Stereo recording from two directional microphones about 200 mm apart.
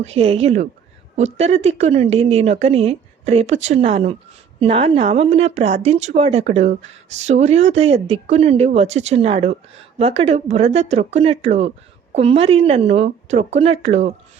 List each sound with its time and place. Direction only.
0.0 s speech: 30° right (ahead or behind)